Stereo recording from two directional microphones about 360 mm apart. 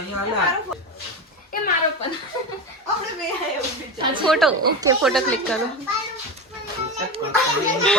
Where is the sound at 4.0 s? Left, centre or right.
Centre.